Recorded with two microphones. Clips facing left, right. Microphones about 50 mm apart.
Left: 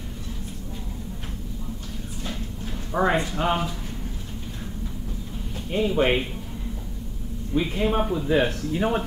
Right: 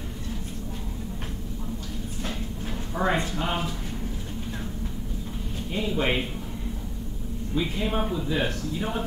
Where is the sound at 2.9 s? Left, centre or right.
Left.